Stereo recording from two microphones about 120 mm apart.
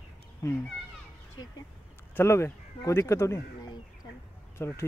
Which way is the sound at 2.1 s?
20° left (ahead or behind).